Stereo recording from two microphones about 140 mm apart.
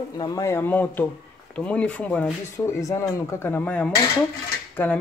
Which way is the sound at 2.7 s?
20° left (ahead or behind).